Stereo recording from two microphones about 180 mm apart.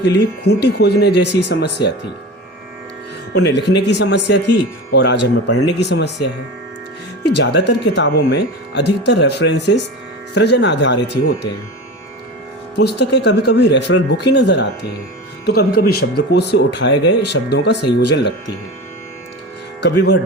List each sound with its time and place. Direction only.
0.0 s speech: 70° left (ahead or behind)
3.3 s speech: 70° left (ahead or behind)
7.3 s speech: 70° left (ahead or behind)
12.8 s speech: 70° left (ahead or behind)
15.4 s speech: 60° left (ahead or behind); by 17.0 s 85° left
17.1 s speech: 70° left (ahead or behind)
19.8 s speech: 70° left (ahead or behind)